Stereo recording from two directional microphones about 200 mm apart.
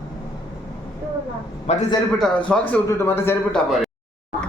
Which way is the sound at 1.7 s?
35° left (ahead or behind).